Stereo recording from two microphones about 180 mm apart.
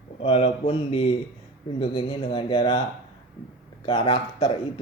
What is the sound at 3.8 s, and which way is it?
Speech, 25° left (ahead or behind).